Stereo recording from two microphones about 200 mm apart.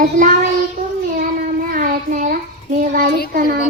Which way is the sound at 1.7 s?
45° right (ahead or behind).